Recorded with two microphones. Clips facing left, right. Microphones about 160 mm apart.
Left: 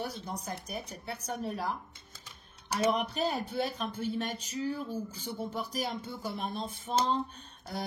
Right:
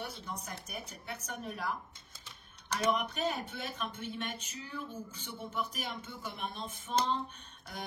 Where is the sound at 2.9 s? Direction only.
35° left (ahead or behind).